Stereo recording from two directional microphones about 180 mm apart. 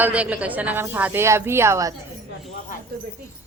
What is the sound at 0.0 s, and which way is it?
A woman's voice, 5° right (ahead or behind).